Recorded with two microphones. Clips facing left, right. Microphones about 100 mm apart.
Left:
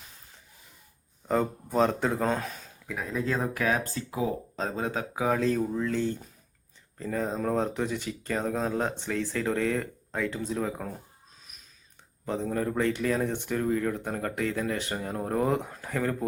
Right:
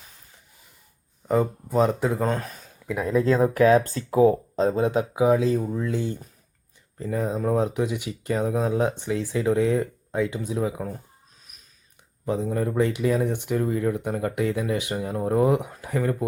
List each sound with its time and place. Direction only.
1.3 s speech: 5° right (ahead or behind)
3.4 s speech: 45° right (ahead or behind)
4.9 s speech: 20° right (ahead or behind)
12.2 s speech: 10° right (ahead or behind)